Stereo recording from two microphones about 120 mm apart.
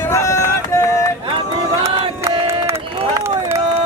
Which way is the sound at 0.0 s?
25° left (ahead or behind).